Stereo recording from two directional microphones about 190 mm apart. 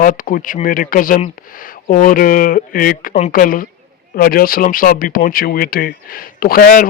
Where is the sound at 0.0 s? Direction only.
45° left (ahead or behind).